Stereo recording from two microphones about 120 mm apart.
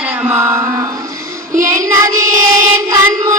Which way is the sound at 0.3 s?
20° right (ahead or behind).